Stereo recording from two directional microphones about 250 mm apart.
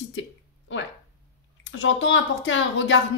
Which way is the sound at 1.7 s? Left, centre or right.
Left.